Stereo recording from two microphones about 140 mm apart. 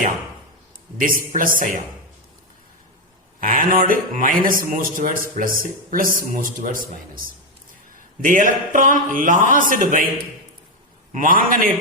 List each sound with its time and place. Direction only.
0.9 s a man's voice: 75° right (ahead or behind)
3.4 s a man's voice: 75° right (ahead or behind)
8.2 s a man's voice: 70° right (ahead or behind)
11.1 s a man's voice: 80° right